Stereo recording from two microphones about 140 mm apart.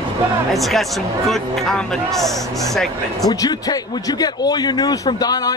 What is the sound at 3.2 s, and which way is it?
Speech, 25° left (ahead or behind).